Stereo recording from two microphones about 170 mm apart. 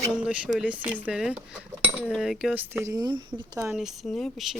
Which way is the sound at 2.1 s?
Centre (ahead or behind).